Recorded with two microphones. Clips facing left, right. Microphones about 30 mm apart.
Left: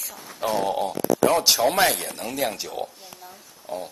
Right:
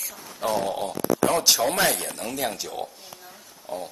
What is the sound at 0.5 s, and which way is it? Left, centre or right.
A woman's voice, centre.